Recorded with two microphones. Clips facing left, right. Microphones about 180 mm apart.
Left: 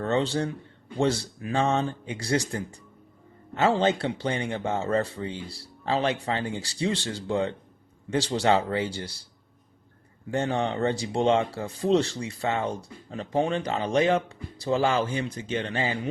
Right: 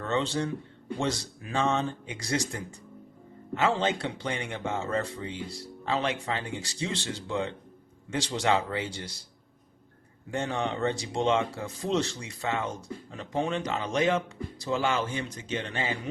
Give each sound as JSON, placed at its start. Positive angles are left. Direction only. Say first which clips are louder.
{"t": 0.0, "sound": "speech", "louder": "left 3 dB", "side_deg": 35}
{"t": 10.3, "sound": "speech", "louder": "left 4 dB", "side_deg": 35}